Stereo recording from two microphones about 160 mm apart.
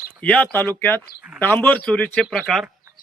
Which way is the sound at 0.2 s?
10° left (ahead or behind).